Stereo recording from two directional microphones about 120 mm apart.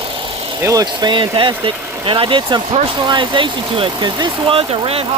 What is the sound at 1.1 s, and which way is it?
Speech, 45° right (ahead or behind).